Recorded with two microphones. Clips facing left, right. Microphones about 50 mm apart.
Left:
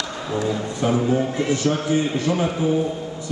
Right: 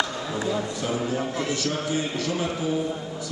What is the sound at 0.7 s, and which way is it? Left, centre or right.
A man's voice, left.